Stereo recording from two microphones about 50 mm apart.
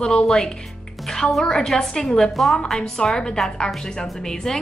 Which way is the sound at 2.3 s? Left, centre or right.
Centre.